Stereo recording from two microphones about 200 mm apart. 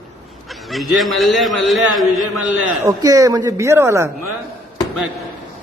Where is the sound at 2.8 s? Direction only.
15° right (ahead or behind).